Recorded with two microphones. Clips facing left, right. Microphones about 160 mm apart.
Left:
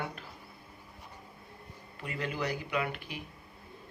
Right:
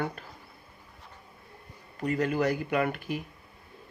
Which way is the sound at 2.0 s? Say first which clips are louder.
Right 9 dB; 45° right (ahead or behind).